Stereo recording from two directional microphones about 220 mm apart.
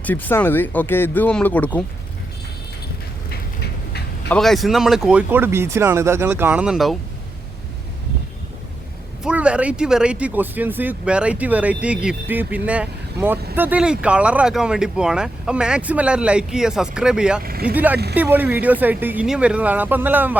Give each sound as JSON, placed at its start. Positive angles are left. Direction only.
{"t": 0.0, "sound": "speech", "side_deg": 10}
{"t": 4.3, "sound": "speech", "side_deg": 0}
{"t": 9.2, "sound": "speech", "side_deg": -5}
{"t": 17.4, "sound": "speech", "side_deg": -45}
{"t": 17.7, "sound": "speech", "side_deg": -5}